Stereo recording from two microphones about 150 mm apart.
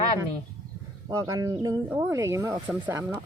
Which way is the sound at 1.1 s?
20° right (ahead or behind).